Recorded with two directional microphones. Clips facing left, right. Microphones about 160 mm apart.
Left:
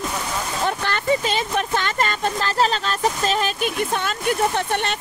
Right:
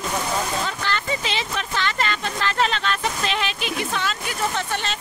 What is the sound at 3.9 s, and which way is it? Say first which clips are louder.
Speech: left 5 dB; 50° left (ahead or behind).